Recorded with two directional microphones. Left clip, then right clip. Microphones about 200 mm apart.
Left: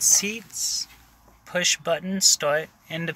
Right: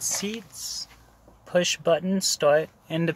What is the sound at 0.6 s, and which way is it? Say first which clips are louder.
Speech: left 6 dB; 25° right (ahead or behind).